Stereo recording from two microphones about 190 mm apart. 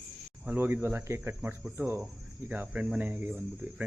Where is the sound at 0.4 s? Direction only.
10° right (ahead or behind).